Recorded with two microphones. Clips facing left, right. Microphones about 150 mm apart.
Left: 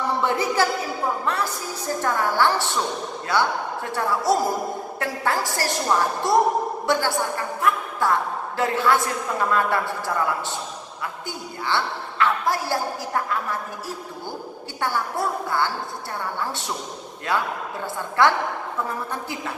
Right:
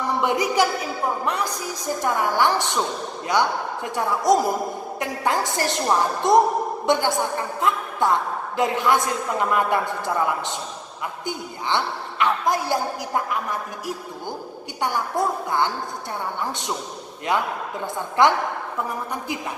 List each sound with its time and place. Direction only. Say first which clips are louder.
0.1 s a woman's voice: right 3 dB; 15° right (ahead or behind)
12.2 s a woman's voice: right 1 dB; 20° right (ahead or behind)